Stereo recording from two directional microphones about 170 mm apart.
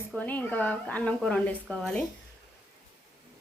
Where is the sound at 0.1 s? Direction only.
10° left (ahead or behind).